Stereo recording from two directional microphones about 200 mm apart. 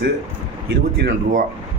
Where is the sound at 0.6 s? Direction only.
50° right (ahead or behind).